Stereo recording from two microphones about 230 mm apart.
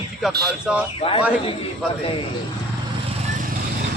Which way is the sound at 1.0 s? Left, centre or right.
Left.